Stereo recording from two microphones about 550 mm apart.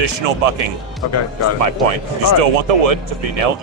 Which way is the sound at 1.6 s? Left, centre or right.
Right.